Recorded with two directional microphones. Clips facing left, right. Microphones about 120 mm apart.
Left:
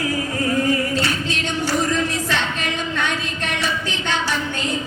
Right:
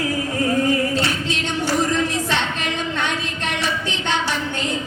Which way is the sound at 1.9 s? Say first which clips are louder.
Right 1 dB; 25° right (ahead or behind).